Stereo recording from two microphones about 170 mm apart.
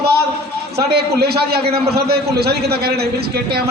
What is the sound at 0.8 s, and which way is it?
A man's voice, 70° right (ahead or behind).